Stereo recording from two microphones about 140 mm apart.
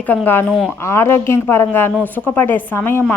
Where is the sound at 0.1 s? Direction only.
10° left (ahead or behind).